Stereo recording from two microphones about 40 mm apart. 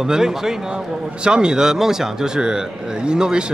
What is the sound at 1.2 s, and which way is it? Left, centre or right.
A man's voice, right.